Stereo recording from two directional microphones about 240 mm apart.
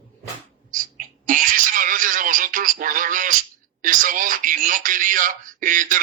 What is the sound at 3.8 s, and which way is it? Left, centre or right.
Speech, right.